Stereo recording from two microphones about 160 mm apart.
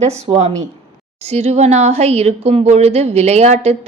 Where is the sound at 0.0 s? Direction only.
45° right (ahead or behind).